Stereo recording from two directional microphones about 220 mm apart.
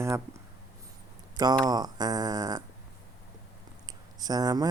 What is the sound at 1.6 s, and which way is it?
Speech, 20° right (ahead or behind).